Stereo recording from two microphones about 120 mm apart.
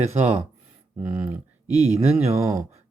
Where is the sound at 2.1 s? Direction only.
60° right (ahead or behind).